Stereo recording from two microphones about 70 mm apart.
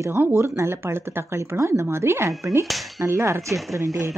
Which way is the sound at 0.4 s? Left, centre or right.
Right.